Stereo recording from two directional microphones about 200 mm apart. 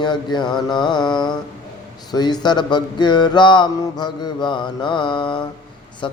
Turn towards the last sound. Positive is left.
turn(degrees=25)  # may be behind; listen again after turning